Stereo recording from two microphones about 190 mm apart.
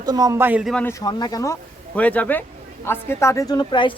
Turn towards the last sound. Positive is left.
turn(degrees=25)  # may be behind; listen again after turning